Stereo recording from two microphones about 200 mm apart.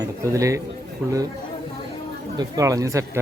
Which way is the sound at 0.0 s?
15° right (ahead or behind).